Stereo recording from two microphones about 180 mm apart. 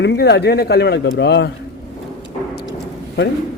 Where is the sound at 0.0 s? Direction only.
70° left (ahead or behind).